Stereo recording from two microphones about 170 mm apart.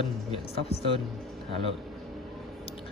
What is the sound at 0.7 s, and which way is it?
Speech, 35° left (ahead or behind).